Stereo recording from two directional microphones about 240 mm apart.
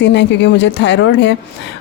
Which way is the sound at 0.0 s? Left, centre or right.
Left.